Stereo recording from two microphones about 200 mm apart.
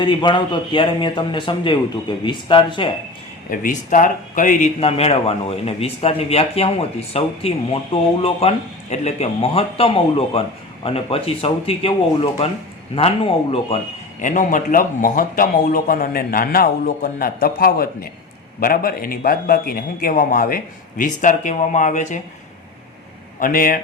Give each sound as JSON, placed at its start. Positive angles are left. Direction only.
{"t": 0.0, "sound": "speech", "side_deg": 25}
{"t": 3.5, "sound": "a man's voice", "side_deg": 40}
{"t": 23.4, "sound": "a man's voice", "side_deg": 45}